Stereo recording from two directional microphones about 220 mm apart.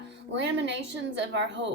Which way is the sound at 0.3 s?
55° right (ahead or behind).